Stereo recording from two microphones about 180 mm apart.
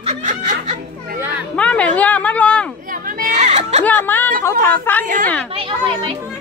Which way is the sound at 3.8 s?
10° left (ahead or behind).